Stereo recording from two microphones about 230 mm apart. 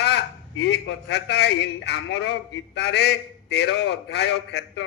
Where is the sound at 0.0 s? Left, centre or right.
Left.